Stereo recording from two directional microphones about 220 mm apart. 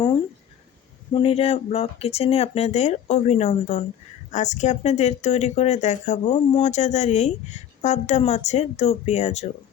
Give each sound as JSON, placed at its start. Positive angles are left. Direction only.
{"t": 1.1, "sound": "speech", "side_deg": 25}